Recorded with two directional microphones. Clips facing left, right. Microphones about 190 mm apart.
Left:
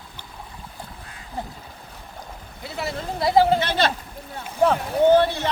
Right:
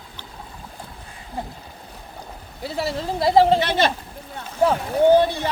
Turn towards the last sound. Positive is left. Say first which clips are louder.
# right 1 dB
turn(degrees=-10)  # may be behind; listen again after turning